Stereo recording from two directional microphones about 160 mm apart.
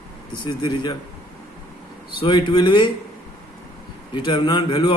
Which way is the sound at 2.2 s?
30° left (ahead or behind).